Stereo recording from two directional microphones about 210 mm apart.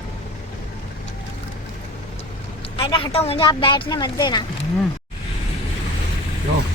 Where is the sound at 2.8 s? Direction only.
25° left (ahead or behind).